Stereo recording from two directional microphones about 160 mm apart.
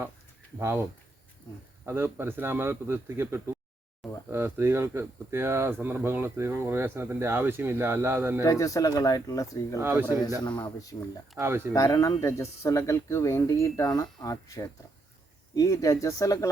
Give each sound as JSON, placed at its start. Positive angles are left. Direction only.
{"t": 0.6, "sound": "speech", "side_deg": -15}
{"t": 8.4, "sound": "speech", "side_deg": 20}
{"t": 9.8, "sound": "speech", "side_deg": -15}
{"t": 10.9, "sound": "speech", "side_deg": 25}
{"t": 11.3, "sound": "speech", "side_deg": -15}
{"t": 11.7, "sound": "speech", "side_deg": 20}